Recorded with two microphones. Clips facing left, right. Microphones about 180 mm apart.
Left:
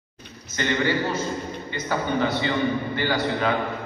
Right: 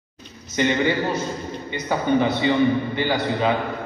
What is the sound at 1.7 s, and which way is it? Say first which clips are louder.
A man's voice: right 5 dB; 20° right (ahead or behind).